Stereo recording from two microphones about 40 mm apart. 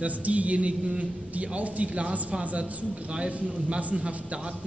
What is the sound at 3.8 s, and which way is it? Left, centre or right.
Speech, right.